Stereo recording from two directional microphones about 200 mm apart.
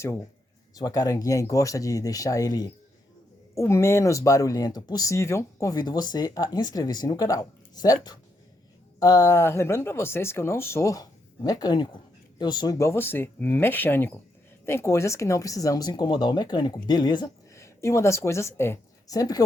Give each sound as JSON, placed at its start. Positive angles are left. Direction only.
{"t": 0.8, "sound": "speech", "side_deg": 20}